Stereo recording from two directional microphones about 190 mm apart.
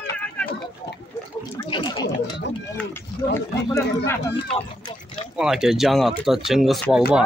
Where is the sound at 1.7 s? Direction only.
20° left (ahead or behind).